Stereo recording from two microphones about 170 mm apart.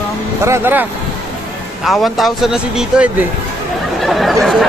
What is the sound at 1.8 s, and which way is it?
A man's voice, centre (ahead or behind).